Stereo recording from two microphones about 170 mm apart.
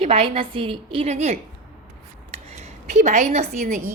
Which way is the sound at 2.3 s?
40° right (ahead or behind).